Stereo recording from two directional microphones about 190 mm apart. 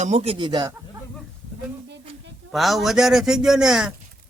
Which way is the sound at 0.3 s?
20° right (ahead or behind).